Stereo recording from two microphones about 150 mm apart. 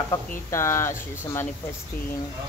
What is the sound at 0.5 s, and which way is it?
Speech, 20° left (ahead or behind).